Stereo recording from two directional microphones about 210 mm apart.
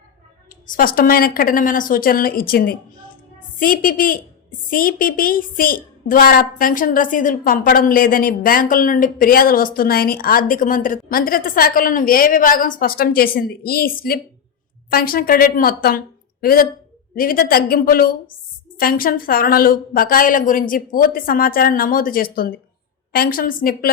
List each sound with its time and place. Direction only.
0.7 s a woman's voice: 45° left (ahead or behind)